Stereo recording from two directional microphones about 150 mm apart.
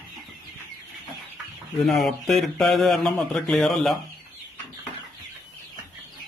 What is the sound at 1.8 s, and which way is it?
Speech, centre (ahead or behind).